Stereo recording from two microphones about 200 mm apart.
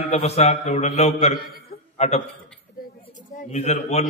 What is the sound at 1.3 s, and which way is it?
Speech, 50° left (ahead or behind).